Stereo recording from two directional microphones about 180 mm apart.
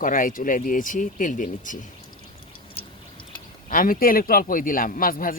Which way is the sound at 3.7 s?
50° left (ahead or behind).